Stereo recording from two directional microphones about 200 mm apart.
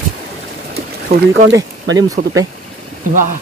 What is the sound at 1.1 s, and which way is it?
Speech, 50° right (ahead or behind).